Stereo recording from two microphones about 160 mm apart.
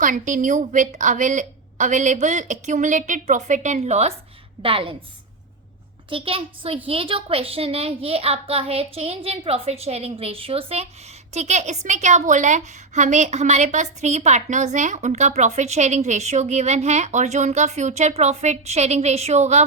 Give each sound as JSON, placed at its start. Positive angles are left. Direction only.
{"t": 0.0, "sound": "a woman's voice", "side_deg": -55}
{"t": 6.1, "sound": "a woman's voice", "side_deg": -35}